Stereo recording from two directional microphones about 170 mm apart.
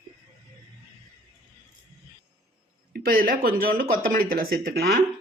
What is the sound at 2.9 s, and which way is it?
Speech, 60° right (ahead or behind).